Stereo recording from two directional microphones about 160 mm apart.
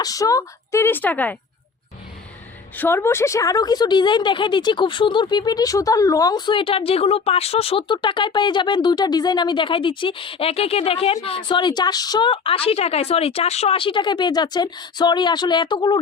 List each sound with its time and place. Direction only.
0.0 s speech: 20° left (ahead or behind)
2.7 s a woman's voice: 15° left (ahead or behind)